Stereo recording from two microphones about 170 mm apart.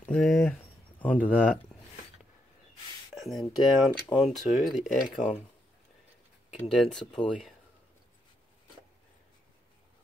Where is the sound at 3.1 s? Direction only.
Centre (ahead or behind).